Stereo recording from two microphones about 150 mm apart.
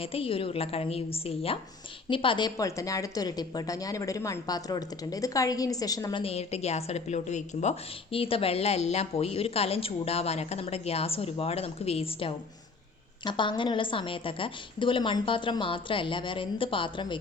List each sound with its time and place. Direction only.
0.0 s a woman's voice: 40° left (ahead or behind)